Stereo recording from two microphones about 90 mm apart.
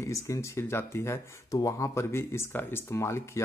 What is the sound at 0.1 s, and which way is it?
Speech, 35° left (ahead or behind).